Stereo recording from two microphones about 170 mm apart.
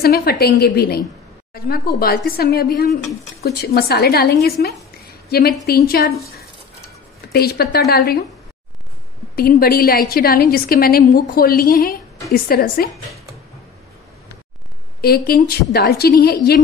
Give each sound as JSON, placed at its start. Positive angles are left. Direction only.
{"t": 0.0, "sound": "a woman's voice", "side_deg": 65}
{"t": 7.3, "sound": "a woman's voice", "side_deg": 65}
{"t": 9.3, "sound": "a woman's voice", "side_deg": 60}
{"t": 15.0, "sound": "a woman's voice", "side_deg": 65}